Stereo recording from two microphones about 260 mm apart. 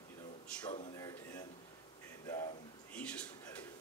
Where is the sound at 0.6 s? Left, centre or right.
Centre.